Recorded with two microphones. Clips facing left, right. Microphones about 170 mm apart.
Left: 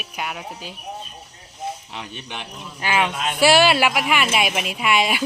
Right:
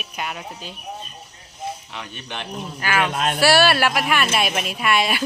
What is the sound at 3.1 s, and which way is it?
Speech, 55° right (ahead or behind).